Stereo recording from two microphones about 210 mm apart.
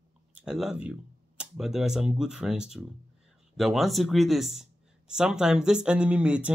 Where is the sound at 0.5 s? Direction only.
5° right (ahead or behind).